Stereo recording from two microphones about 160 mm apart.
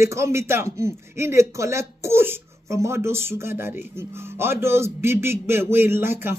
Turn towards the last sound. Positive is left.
turn(degrees=-15)  # may be behind; listen again after turning